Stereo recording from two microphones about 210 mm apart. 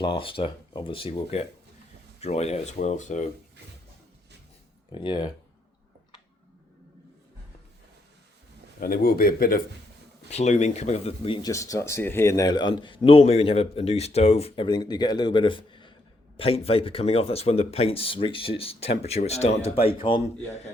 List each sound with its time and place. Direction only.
0.0 s speech: 25° left (ahead or behind)
4.9 s speech: 20° left (ahead or behind)
8.8 s speech: 45° left (ahead or behind)
10.2 s speech: 30° left (ahead or behind)